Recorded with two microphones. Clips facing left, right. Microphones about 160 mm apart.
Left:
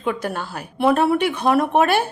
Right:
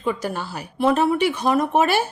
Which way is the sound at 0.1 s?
55° left (ahead or behind).